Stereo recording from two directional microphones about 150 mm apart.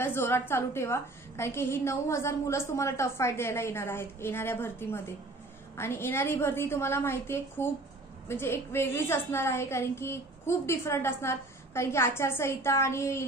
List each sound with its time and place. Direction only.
0.0 s a woman's voice: 15° left (ahead or behind)